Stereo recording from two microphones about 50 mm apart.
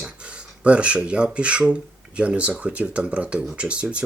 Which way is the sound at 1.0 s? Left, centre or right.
Right.